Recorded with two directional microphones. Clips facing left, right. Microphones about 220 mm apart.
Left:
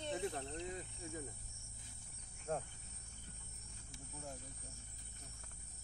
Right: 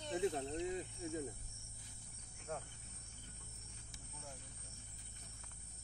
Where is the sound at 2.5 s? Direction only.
35° left (ahead or behind).